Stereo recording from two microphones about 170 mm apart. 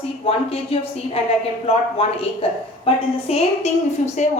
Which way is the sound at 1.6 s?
35° left (ahead or behind).